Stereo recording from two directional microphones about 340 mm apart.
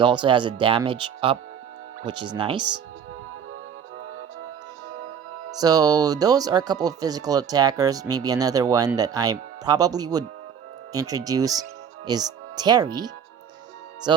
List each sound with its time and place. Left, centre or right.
0.0 s speech: centre
2.6 s speech: right
5.5 s speech: centre
14.1 s music: centre